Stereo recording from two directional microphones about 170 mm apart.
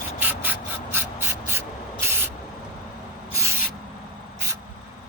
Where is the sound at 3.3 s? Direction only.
15° right (ahead or behind).